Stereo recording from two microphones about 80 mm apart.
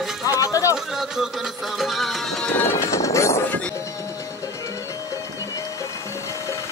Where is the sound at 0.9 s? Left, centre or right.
Centre.